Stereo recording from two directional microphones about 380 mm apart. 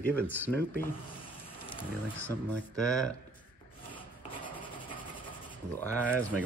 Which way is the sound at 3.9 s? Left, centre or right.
Centre.